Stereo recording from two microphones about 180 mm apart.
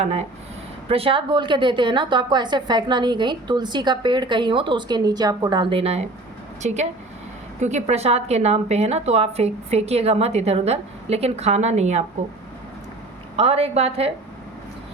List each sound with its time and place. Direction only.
0.0 s a woman's voice: 35° right (ahead or behind)
13.3 s a woman's voice: 35° right (ahead or behind)